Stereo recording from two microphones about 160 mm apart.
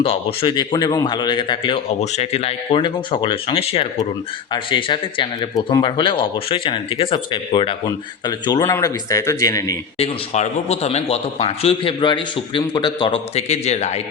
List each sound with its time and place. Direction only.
0.0 s a man's voice: 35° left (ahead or behind); by 9.7 s 20° left (ahead or behind)
10.0 s a man's voice: 45° left (ahead or behind)